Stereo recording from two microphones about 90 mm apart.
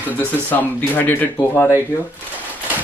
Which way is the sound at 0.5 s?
20° left (ahead or behind).